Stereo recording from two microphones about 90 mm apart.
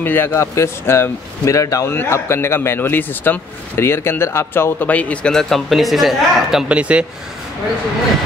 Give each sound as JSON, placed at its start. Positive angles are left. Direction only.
{"t": 0.0, "sound": "speech", "side_deg": 25}
{"t": 6.7, "sound": "speech", "side_deg": -15}